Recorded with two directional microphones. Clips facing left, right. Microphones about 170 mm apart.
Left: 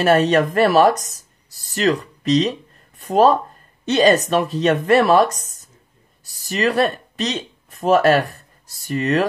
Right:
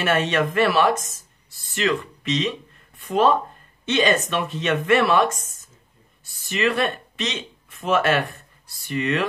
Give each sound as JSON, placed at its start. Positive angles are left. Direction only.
{"t": 0.0, "sound": "speech", "side_deg": 40}